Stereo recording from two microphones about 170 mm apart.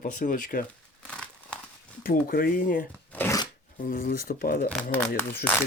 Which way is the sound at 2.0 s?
55° left (ahead or behind).